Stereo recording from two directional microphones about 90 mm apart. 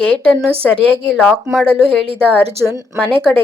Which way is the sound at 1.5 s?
5° left (ahead or behind).